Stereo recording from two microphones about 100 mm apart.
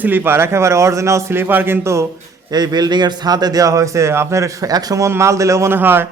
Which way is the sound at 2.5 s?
45° right (ahead or behind).